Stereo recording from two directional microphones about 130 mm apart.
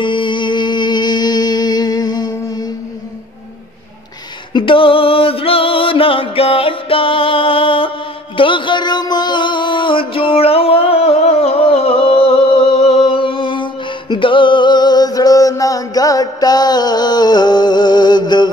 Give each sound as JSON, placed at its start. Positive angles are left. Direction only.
{"t": 0.0, "sound": "music", "side_deg": 35}
{"t": 4.6, "sound": "music", "side_deg": 40}